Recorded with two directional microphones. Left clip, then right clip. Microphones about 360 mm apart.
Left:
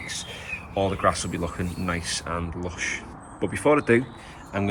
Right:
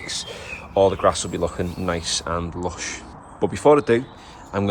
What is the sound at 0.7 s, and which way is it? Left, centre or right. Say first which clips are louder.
Speech: right 6 dB; centre.